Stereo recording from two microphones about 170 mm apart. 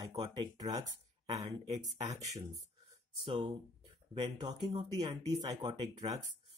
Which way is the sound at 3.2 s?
30° right (ahead or behind).